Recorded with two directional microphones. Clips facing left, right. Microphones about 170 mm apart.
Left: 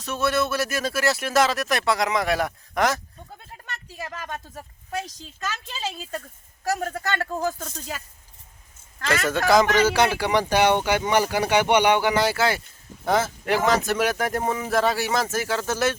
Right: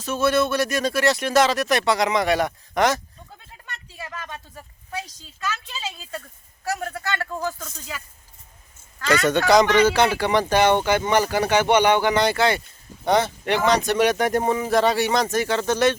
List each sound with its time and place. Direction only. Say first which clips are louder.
0.0 s speech: right 3 dB; centre (ahead or behind)
4.3 s speech: left 3 dB; 45° left (ahead or behind)
9.0 s speech: right 3 dB; centre (ahead or behind)